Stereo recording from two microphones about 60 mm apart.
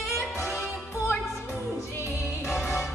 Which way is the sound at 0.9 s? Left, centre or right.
Left.